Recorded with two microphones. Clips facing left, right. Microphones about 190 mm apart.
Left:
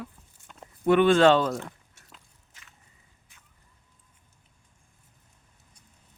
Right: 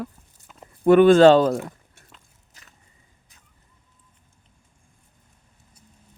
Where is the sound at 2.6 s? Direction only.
40° right (ahead or behind).